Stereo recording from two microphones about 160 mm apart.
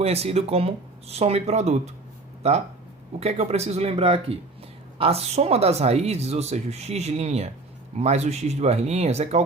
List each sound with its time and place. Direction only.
0.0 s speech: 40° right (ahead or behind)